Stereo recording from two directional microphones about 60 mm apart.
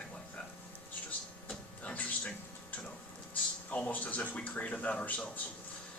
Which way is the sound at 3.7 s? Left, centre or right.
Left.